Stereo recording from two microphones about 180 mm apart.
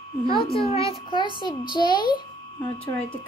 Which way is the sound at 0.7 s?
30° left (ahead or behind).